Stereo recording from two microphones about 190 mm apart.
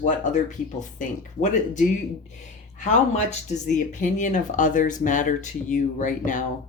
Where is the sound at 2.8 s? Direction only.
40° left (ahead or behind).